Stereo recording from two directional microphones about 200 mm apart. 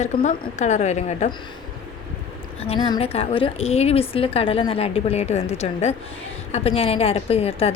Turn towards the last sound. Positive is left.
turn(degrees=30)  # may be behind; listen again after turning